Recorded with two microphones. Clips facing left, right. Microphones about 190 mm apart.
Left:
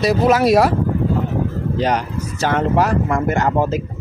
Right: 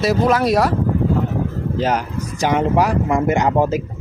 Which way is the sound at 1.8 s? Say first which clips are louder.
Even; 10° right (ahead or behind).